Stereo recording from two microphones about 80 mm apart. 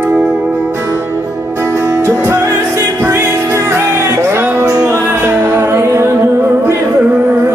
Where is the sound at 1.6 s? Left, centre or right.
Right.